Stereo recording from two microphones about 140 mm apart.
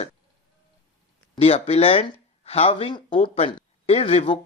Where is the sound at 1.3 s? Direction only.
45° left (ahead or behind).